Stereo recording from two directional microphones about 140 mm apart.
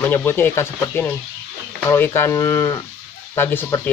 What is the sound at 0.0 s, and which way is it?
Speech, 15° left (ahead or behind).